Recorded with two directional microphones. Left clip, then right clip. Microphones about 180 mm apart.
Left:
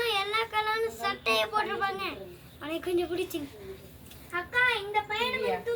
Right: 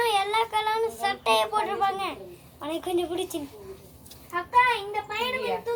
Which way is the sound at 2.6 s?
20° left (ahead or behind).